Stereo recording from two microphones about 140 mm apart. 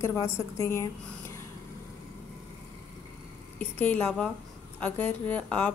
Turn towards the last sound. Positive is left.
turn(degrees=10)  # may be behind; listen again after turning